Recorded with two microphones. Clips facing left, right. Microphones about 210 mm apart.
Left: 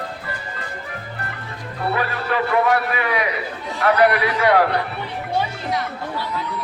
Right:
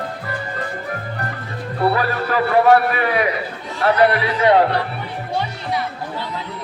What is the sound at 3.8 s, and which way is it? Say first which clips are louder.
Speech: right 1 dB; 25° right (ahead or behind).